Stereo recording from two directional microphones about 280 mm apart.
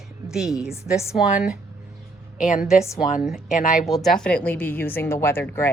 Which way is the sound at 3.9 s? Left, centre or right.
Centre.